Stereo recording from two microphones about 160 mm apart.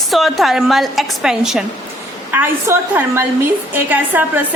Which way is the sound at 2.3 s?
15° right (ahead or behind).